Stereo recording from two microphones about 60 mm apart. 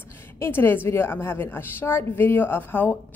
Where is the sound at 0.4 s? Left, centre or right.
Left.